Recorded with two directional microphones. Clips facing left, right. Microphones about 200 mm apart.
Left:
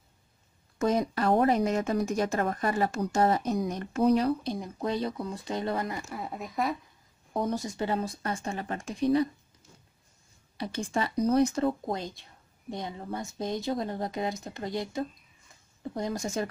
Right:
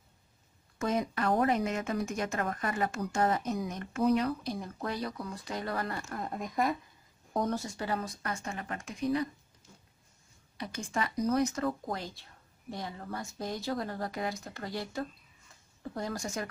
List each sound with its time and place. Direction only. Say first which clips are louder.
0.7 s speech: left 4 dB; 35° left (ahead or behind); by 6.8 s centre (ahead or behind)
7.3 s speech: left 2 dB; 15° left (ahead or behind); by 9.3 s 30° left (ahead or behind)
10.6 s speech: left 4 dB; 30° left (ahead or behind)